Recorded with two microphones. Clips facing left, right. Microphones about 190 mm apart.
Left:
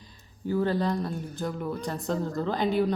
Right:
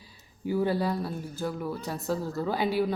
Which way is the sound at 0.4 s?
10° right (ahead or behind).